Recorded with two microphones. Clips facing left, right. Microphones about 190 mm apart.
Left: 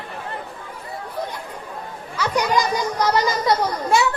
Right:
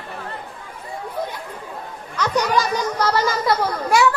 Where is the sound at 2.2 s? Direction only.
10° left (ahead or behind).